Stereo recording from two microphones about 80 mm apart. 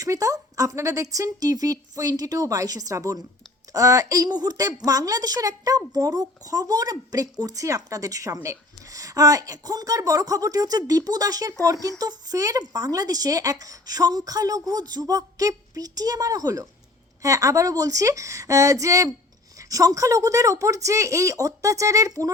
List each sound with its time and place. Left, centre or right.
0.0 s a woman's voice: right
4.3 s a woman's voice: right